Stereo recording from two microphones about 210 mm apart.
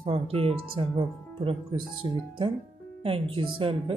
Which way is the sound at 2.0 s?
20° right (ahead or behind).